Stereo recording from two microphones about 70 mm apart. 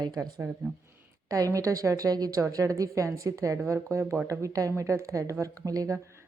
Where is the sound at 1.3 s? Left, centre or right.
Right.